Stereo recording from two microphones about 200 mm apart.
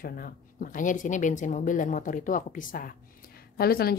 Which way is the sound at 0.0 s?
45° left (ahead or behind).